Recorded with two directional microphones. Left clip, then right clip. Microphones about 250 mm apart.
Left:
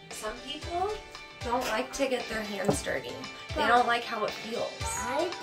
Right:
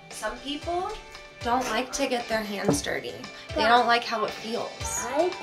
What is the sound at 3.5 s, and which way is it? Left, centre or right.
Speech, centre.